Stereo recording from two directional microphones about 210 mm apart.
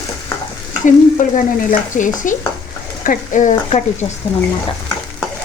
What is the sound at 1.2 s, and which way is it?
Frying, 40° left (ahead or behind).